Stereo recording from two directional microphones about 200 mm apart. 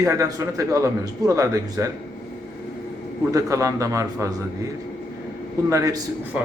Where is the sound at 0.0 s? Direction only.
15° right (ahead or behind).